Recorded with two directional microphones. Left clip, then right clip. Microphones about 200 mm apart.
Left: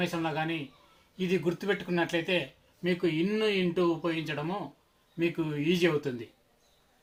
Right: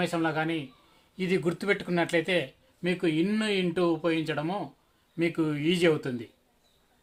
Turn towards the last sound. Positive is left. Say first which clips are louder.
# right 2 dB
turn(degrees=-45)  # may be behind; listen again after turning